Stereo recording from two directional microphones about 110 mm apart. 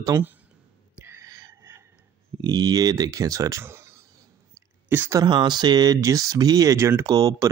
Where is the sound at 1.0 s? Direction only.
25° right (ahead or behind).